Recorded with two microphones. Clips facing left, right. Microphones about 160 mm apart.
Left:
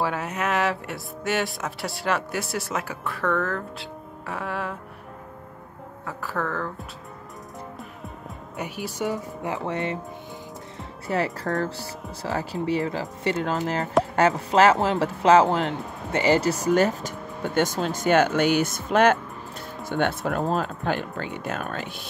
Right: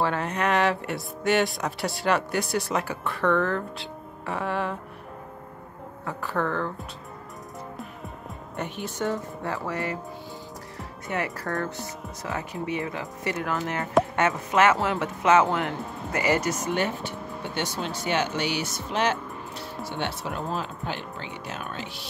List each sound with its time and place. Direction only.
0.0 s speech: 10° left (ahead or behind)
6.0 s speech: centre (ahead or behind)
8.5 s speech: 10° left (ahead or behind); by 22.0 s 50° left (ahead or behind)